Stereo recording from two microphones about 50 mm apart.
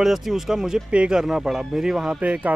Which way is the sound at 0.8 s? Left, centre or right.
Right.